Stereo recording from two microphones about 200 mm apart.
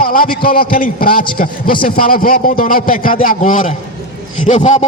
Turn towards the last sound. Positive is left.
turn(degrees=35)  # may be behind; listen again after turning